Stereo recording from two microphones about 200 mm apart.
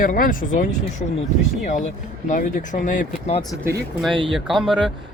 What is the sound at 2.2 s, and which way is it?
Speech, 40° left (ahead or behind).